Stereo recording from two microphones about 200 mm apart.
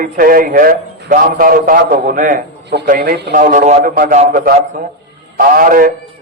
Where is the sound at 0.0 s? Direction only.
45° right (ahead or behind).